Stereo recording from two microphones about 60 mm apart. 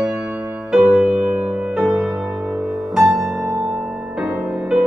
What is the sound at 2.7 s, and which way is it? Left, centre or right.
Music, centre.